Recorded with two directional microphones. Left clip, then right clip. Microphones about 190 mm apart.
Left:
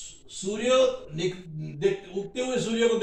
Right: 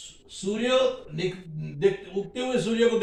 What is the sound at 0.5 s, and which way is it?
A man's voice, 15° right (ahead or behind).